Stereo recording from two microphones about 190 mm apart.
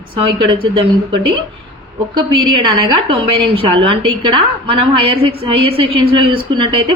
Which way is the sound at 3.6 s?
30° right (ahead or behind).